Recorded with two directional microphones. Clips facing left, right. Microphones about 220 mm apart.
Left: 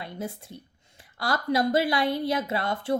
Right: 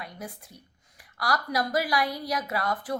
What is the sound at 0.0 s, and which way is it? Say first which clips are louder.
A woman's voice: left 5 dB; 25° left (ahead or behind).